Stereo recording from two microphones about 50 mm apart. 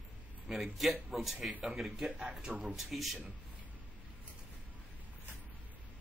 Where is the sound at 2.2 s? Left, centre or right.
Centre.